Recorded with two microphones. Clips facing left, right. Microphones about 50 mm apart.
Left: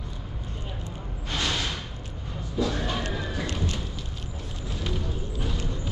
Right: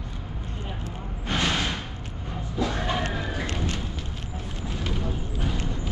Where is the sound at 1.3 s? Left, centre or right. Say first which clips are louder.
Right 3 dB; right.